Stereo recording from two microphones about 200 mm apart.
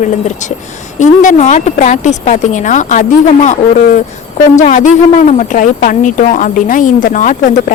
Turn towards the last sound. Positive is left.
turn(degrees=40)  # may be behind; listen again after turning